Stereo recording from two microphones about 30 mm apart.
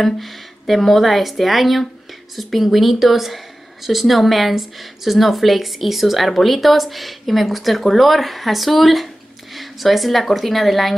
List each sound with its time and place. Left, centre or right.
0.0 s speech: centre